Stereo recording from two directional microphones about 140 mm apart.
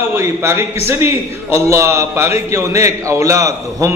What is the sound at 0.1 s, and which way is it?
A man's voice, 20° right (ahead or behind).